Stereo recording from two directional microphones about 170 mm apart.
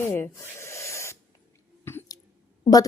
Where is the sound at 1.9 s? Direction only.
15° left (ahead or behind).